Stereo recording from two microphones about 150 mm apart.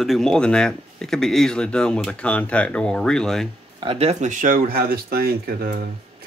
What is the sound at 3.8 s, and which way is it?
Speech, 40° right (ahead or behind).